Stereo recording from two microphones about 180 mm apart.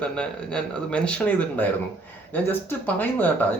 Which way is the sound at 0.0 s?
5° left (ahead or behind).